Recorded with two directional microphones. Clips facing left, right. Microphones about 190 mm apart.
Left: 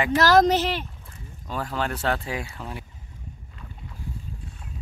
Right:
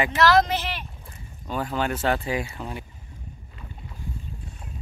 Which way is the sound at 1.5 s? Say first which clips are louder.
Right 2 dB; 5° right (ahead or behind).